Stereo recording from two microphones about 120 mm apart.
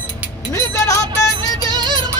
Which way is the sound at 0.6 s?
25° left (ahead or behind).